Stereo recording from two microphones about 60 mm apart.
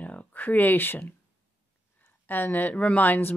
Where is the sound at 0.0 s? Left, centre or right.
Left.